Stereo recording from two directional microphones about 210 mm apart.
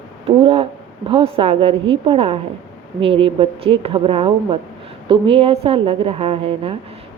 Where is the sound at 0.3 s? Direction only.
25° right (ahead or behind).